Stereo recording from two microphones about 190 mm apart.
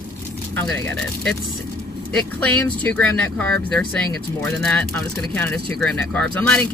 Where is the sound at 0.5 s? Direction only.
5° left (ahead or behind).